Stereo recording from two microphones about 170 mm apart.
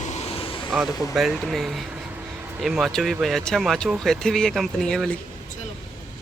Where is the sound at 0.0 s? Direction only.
40° left (ahead or behind).